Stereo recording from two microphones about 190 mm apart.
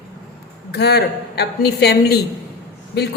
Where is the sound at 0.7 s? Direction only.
60° left (ahead or behind).